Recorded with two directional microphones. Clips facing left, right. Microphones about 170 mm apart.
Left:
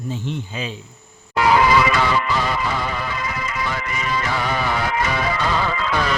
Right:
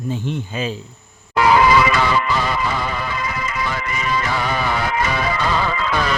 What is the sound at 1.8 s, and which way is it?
Music, 90° right.